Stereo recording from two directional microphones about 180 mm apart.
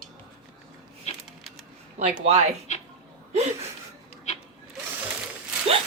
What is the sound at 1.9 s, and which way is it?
Speech, 35° right (ahead or behind).